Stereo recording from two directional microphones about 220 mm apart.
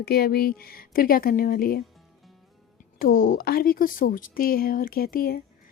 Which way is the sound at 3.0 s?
40° left (ahead or behind).